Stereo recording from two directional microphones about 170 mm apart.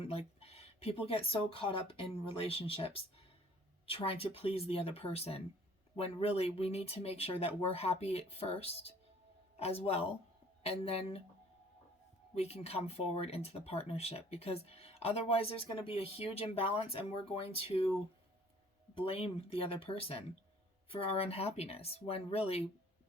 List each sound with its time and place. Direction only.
0.0 s speech: 35° left (ahead or behind)
9.8 s speech: 35° left (ahead or behind)
12.3 s speech: 35° left (ahead or behind)
18.9 s speech: 35° left (ahead or behind)